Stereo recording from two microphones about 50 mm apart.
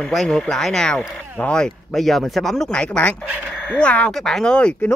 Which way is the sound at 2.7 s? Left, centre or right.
Left.